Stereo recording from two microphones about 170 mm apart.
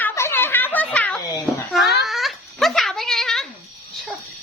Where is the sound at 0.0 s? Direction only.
15° left (ahead or behind).